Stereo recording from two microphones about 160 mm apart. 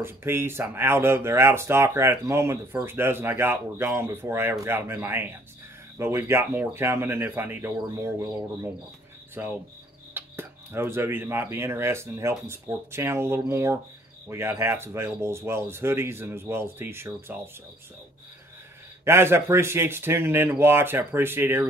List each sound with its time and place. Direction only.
0.0 s speech: 15° right (ahead or behind)
9.4 s speech: 15° right (ahead or behind)
19.0 s speech: 15° right (ahead or behind)